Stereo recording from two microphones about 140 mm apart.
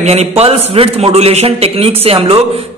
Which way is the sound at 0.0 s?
50° right (ahead or behind).